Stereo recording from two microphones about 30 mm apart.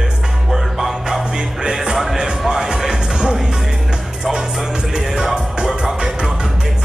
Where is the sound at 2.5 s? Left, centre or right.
Centre.